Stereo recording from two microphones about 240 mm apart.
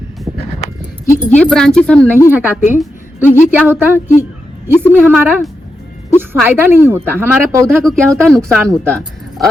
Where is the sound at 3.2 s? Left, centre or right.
Left.